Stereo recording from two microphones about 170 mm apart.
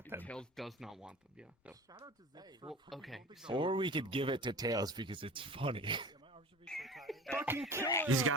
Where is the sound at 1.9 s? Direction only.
25° right (ahead or behind).